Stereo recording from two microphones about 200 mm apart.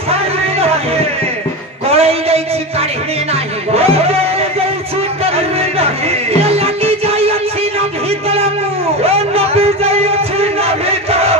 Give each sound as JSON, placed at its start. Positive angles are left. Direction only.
{"t": 0.1, "sound": "music", "side_deg": -30}
{"t": 1.9, "sound": "a sound", "side_deg": -30}
{"t": 3.7, "sound": "music", "side_deg": -30}
{"t": 6.4, "sound": "music", "side_deg": -30}
{"t": 9.0, "sound": "music", "side_deg": -30}